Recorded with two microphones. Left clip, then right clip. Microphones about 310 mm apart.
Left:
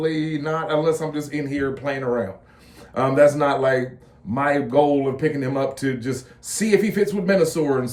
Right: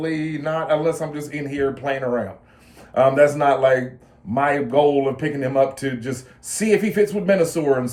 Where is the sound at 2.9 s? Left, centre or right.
Centre.